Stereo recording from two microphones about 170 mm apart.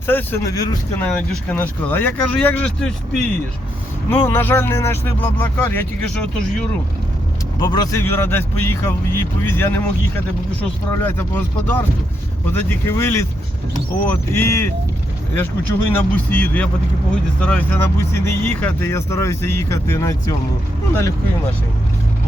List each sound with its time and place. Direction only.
0.1 s speech: 10° left (ahead or behind)
0.9 s speech: 5° left (ahead or behind)
7.6 s speech: 25° left (ahead or behind)
10.9 s speech: 10° left (ahead or behind)
15.9 s speech: 10° left (ahead or behind)